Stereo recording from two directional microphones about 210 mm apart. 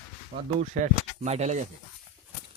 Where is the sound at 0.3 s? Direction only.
35° right (ahead or behind).